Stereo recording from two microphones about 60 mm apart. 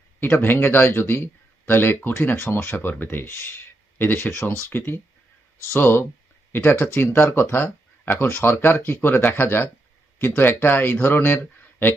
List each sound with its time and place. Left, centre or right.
0.2 s speech: left
2.6 s speech: left
5.6 s speech: left